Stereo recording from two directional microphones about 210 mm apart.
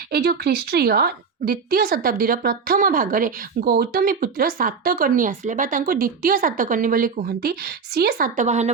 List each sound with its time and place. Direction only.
0.1 s a woman's voice: 50° right (ahead or behind)